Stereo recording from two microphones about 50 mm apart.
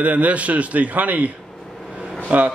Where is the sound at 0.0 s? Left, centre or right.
Right.